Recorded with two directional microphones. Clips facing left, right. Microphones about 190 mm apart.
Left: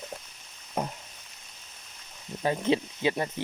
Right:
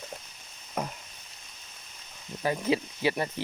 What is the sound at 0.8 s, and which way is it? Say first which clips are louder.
Frying: left 2 dB; 30° left (ahead or behind).